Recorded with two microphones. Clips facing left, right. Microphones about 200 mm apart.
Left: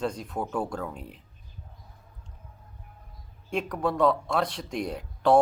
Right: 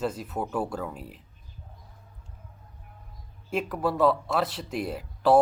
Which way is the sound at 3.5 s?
5° right (ahead or behind).